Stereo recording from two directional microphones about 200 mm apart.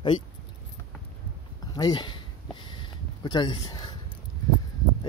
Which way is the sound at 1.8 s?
20° left (ahead or behind).